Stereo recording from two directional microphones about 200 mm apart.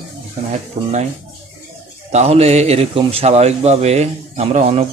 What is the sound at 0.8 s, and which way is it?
Speech, 30° right (ahead or behind).